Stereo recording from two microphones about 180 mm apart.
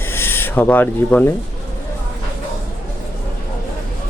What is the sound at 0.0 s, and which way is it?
Owl, 10° left (ahead or behind).